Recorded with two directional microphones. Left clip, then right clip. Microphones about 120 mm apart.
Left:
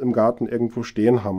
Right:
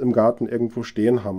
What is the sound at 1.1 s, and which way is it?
Speech, 15° left (ahead or behind).